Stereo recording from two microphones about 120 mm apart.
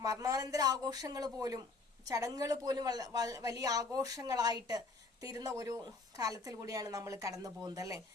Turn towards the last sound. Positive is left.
turn(degrees=-30)  # may be behind; listen again after turning